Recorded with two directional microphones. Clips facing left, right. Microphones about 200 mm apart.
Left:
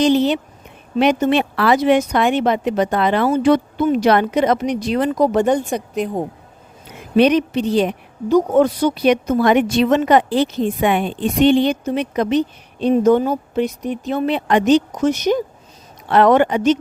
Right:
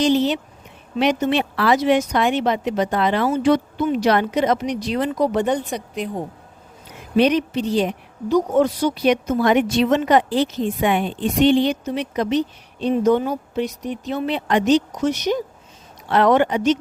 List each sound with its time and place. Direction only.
0.0 s a woman's voice: 55° left (ahead or behind)
7.2 s a woman's voice: 65° left (ahead or behind)